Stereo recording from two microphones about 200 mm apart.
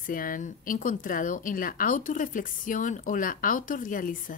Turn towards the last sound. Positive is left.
turn(degrees=40)  # may be behind; listen again after turning